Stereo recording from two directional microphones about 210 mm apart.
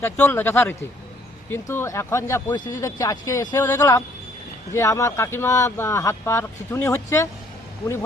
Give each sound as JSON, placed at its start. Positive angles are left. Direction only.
{"t": 0.0, "sound": "speech", "side_deg": 10}